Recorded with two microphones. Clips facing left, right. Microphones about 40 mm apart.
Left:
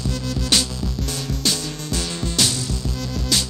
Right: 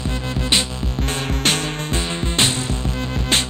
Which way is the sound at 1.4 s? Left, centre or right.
Right.